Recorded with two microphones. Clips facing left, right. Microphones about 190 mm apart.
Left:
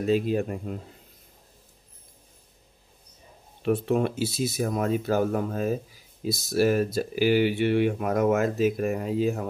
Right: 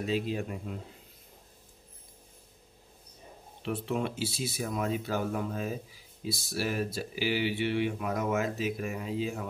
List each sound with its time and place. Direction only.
0.0 s speech: 50° left (ahead or behind)
3.6 s speech: 45° left (ahead or behind)